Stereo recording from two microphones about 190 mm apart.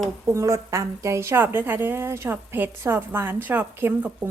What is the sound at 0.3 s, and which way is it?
A woman's voice, 15° right (ahead or behind).